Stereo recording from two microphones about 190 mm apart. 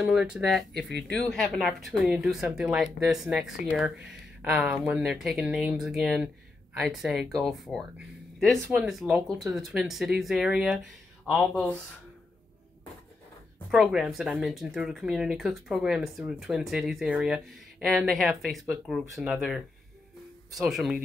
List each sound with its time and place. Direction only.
0.0 s speech: 5° right (ahead or behind)
13.7 s speech: 5° right (ahead or behind)